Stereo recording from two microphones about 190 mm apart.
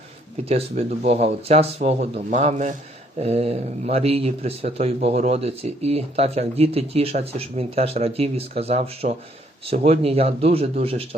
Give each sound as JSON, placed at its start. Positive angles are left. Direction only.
{"t": 0.4, "sound": "speech", "side_deg": -35}